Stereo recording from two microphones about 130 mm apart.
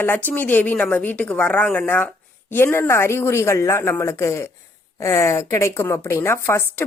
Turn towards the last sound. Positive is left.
turn(degrees=20)  # may be behind; listen again after turning